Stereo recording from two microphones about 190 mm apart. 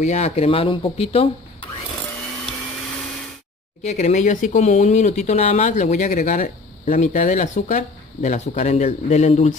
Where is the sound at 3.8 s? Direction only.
35° left (ahead or behind).